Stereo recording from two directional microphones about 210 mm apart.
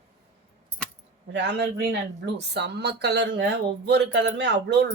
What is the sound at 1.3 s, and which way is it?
Speech, 55° right (ahead or behind).